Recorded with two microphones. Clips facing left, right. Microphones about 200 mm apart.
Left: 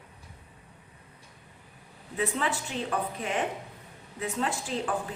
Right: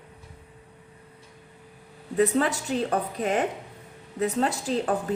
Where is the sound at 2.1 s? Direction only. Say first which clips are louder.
Right 8 dB; 40° right (ahead or behind).